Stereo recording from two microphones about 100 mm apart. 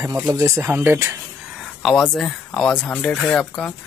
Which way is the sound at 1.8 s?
5° left (ahead or behind).